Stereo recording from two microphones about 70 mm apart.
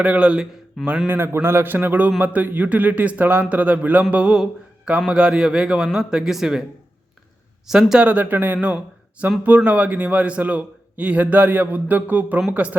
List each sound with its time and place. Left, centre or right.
0.0 s a man's voice: centre
1.0 s a man's voice: right; by 6.7 s centre
7.7 s a man's voice: centre